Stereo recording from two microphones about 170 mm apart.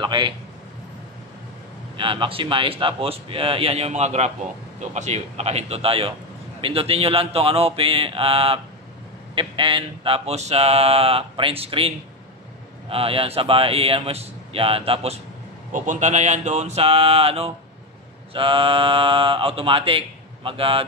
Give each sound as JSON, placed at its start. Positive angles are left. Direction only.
{"t": 0.0, "sound": "a man's voice", "side_deg": -30}
{"t": 2.0, "sound": "mantra", "side_deg": -30}
{"t": 12.9, "sound": "mantra", "side_deg": -35}
{"t": 15.7, "sound": "mantra", "side_deg": -50}